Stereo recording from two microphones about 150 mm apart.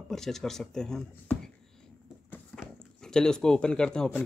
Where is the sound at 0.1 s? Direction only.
5° left (ahead or behind).